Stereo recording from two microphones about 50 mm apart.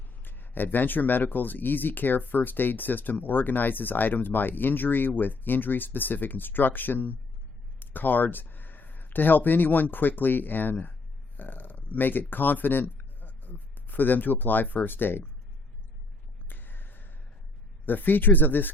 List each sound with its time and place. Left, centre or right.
0.2 s speech: left
16.5 s a sound: left
17.8 s speech: left